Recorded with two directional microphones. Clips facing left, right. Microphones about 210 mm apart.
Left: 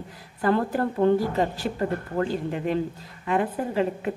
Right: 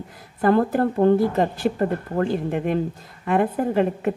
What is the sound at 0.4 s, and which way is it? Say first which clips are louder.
A woman's voice: right 5 dB; 45° right (ahead or behind).